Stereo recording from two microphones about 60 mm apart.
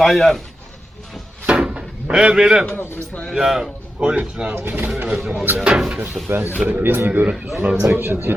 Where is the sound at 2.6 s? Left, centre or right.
Left.